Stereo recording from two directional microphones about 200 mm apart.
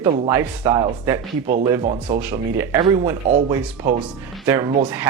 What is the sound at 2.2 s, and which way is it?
Speech, 10° right (ahead or behind).